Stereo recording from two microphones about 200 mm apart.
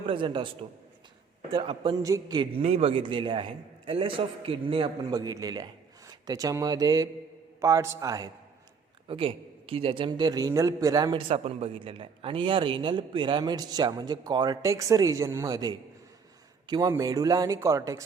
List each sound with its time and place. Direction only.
0.0 s a man's voice: 25° right (ahead or behind)
1.5 s a man's voice: 25° right (ahead or behind)
9.0 s a man's voice: 25° right (ahead or behind)